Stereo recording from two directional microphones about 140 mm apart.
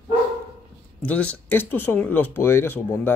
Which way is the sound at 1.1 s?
10° left (ahead or behind).